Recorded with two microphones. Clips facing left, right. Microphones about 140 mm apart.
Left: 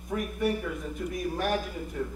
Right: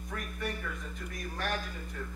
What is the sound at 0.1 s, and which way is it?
A man's voice, 10° left (ahead or behind).